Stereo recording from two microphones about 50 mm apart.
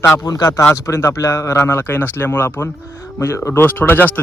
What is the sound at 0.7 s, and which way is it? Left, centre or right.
Speech, left.